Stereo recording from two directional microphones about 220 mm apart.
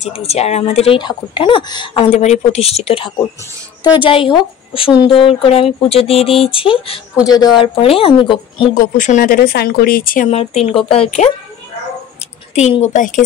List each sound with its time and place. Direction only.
0.0 s speech: 30° left (ahead or behind)
8.7 s speech: 35° left (ahead or behind)
12.5 s speech: 30° left (ahead or behind)